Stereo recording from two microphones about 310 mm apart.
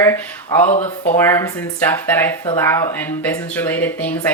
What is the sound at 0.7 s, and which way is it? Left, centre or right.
Speech, left.